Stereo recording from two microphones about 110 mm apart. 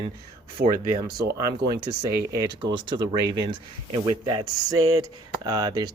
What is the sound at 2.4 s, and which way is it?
Speech, 45° right (ahead or behind).